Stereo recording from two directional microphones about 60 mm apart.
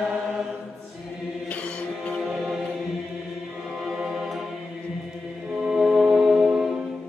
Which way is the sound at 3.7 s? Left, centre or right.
Centre.